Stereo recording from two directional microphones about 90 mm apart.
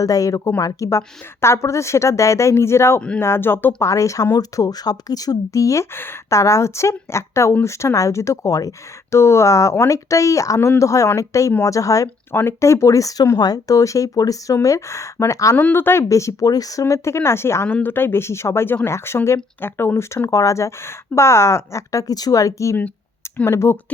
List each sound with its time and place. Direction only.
0.0 s speech: 40° left (ahead or behind)
3.8 s speech: 35° left (ahead or behind)
12.3 s speech: 25° left (ahead or behind)
15.5 s speech: 20° left (ahead or behind); by 16.8 s 40° left (ahead or behind)
16.8 s speech: 30° left (ahead or behind)